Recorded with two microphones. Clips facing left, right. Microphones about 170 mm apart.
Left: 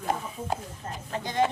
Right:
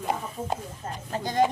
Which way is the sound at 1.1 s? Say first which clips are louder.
Right 3 dB; 40° right (ahead or behind).